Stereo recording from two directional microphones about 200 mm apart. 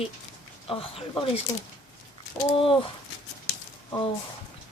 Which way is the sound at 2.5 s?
25° left (ahead or behind).